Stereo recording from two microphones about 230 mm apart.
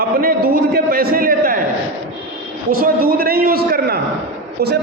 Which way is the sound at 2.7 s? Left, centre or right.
Right.